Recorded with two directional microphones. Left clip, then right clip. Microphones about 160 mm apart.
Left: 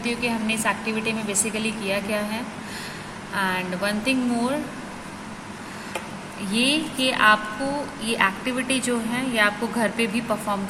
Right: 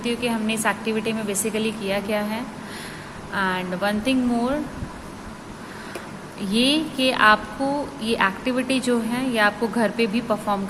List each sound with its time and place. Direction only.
0.0 s speech: 15° right (ahead or behind)
6.5 s a woman's voice: 25° right (ahead or behind)